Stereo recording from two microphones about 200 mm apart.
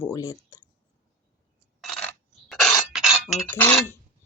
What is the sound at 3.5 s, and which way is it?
Speech, 10° left (ahead or behind).